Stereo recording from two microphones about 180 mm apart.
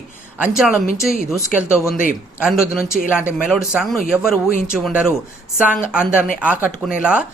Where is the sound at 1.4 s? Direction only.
15° left (ahead or behind).